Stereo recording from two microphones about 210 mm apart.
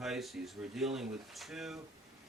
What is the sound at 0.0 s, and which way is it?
Speech, centre (ahead or behind).